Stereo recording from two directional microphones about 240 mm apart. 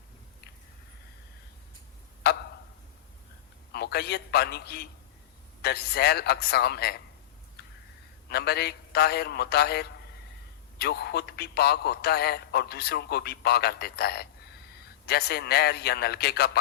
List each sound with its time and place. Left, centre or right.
2.3 s tick-tock: left
3.7 s a man's voice: left
7.6 s a sound: left
8.3 s a man's voice: left